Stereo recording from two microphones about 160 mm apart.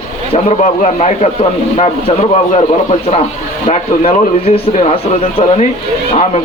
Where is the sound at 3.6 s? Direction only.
50° left (ahead or behind).